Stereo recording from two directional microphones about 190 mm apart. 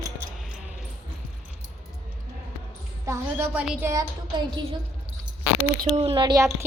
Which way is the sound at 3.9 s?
25° right (ahead or behind).